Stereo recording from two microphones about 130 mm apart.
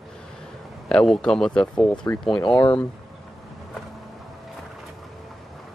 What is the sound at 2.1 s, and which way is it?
Speech, 20° left (ahead or behind).